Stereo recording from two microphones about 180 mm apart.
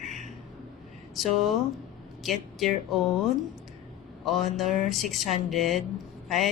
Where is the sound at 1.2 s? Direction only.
Centre (ahead or behind).